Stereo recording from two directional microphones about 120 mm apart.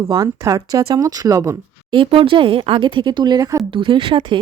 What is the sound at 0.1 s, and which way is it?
Speech, 30° right (ahead or behind).